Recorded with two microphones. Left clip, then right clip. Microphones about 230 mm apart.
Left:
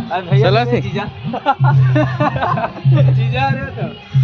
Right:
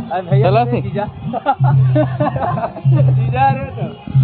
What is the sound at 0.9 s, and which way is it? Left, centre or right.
Speech, right.